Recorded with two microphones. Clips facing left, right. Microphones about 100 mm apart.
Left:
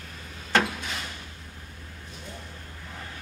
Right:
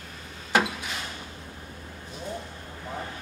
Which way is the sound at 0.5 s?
5° right (ahead or behind).